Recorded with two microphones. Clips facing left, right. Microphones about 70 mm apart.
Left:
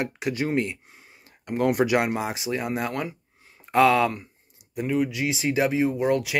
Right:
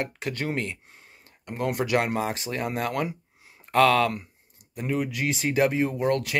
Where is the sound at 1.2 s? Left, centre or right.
Centre.